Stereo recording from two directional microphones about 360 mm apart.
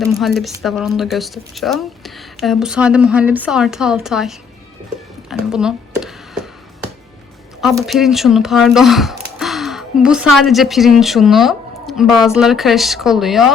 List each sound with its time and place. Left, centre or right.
0.1 s a woman's voice: centre
5.3 s a sound: centre
7.6 s speech: centre